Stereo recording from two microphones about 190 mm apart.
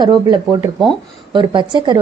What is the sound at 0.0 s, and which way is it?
A woman's voice, 20° right (ahead or behind).